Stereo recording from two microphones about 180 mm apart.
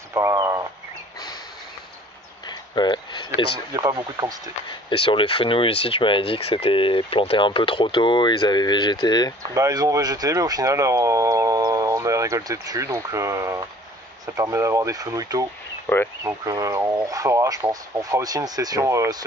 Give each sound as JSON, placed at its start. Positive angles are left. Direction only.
{"t": 0.1, "sound": "speech", "side_deg": -15}
{"t": 2.4, "sound": "a sound", "side_deg": 25}
{"t": 3.7, "sound": "speech", "side_deg": -20}
{"t": 4.8, "sound": "speech", "side_deg": 30}
{"t": 9.5, "sound": "speech", "side_deg": -20}
{"t": 15.9, "sound": "speech", "side_deg": 10}
{"t": 16.3, "sound": "speech", "side_deg": -20}